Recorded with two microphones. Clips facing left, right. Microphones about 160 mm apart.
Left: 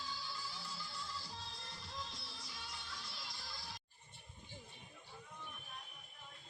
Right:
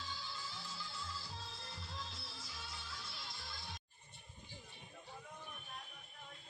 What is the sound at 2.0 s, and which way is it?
Music, centre (ahead or behind).